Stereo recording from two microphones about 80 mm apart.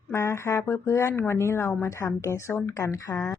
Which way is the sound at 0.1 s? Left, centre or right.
Left.